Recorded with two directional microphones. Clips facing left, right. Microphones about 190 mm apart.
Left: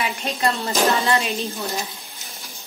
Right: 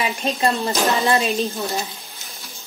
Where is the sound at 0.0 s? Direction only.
25° right (ahead or behind).